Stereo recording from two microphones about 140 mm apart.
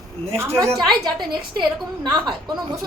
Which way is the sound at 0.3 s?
20° right (ahead or behind).